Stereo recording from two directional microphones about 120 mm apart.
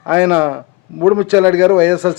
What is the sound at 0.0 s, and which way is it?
A man's voice, 10° right (ahead or behind).